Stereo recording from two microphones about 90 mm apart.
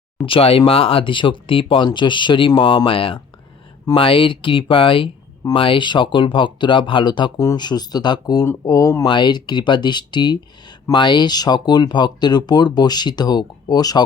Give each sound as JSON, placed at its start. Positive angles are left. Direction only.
{"t": 0.2, "sound": "speech", "side_deg": 80}
{"t": 7.3, "sound": "speech", "side_deg": 45}
{"t": 9.0, "sound": "speech", "side_deg": 55}